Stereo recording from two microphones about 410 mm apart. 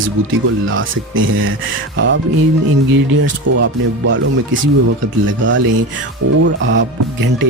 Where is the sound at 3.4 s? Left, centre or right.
Right.